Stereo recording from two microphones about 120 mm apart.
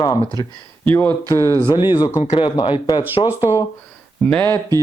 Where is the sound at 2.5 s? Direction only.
40° left (ahead or behind).